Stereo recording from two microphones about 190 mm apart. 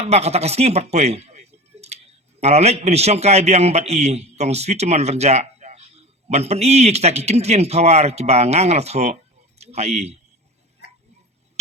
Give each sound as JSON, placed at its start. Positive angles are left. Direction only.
{"t": 0.0, "sound": "a man's voice", "side_deg": -35}